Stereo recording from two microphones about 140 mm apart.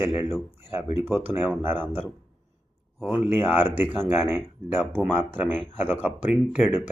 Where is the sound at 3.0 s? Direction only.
15° right (ahead or behind).